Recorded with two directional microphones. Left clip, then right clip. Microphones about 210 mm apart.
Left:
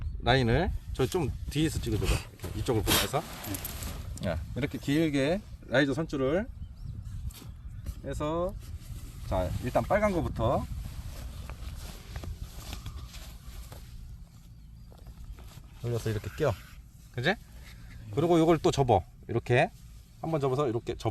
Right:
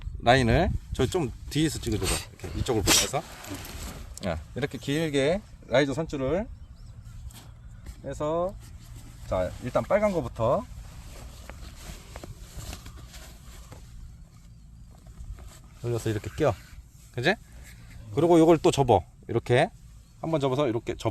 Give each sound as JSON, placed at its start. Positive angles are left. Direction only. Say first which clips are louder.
{"t": 0.2, "sound": "speech", "louder": "right 5 dB", "side_deg": -30}
{"t": 1.9, "sound": "speech", "louder": "right 3 dB", "side_deg": -5}
{"t": 2.6, "sound": "speech", "louder": "right 4 dB", "side_deg": -20}
{"t": 7.9, "sound": "speech", "louder": "right 4 dB", "side_deg": 0}
{"t": 10.2, "sound": "speech", "louder": "right 4 dB", "side_deg": -20}
{"t": 12.2, "sound": "a sound", "louder": "right 2 dB", "side_deg": -5}
{"t": 15.8, "sound": "speech", "louder": "right 4 dB", "side_deg": -25}